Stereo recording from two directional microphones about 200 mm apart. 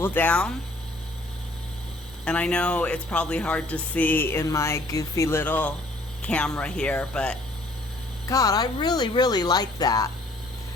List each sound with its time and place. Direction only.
0.0 s speech: 10° left (ahead or behind)
2.2 s speech: 5° left (ahead or behind)
8.3 s speech: 15° left (ahead or behind)